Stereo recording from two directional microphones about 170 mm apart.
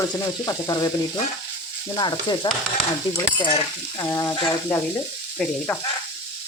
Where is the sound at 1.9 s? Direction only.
25° left (ahead or behind).